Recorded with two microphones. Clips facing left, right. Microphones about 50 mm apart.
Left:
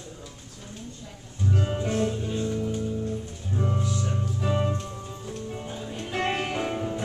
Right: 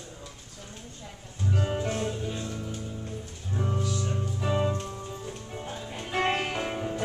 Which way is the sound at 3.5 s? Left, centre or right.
Centre.